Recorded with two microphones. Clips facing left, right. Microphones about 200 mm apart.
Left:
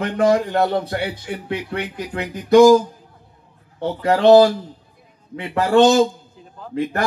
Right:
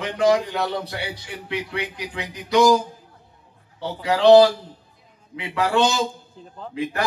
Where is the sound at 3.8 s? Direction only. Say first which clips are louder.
Left 3 dB; 50° left (ahead or behind).